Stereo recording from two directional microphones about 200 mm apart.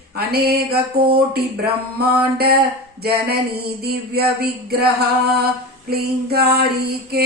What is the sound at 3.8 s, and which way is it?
Music, 50° right (ahead or behind).